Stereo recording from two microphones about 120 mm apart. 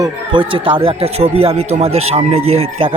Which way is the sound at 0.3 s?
45° right (ahead or behind).